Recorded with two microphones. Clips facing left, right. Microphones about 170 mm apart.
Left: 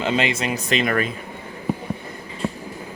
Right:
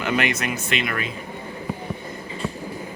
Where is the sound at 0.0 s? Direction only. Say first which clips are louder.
Left 2 dB; 25° left (ahead or behind); by 1.1 s 45° left (ahead or behind).